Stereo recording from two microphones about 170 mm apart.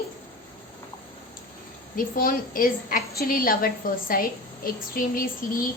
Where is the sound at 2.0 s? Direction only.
55° left (ahead or behind).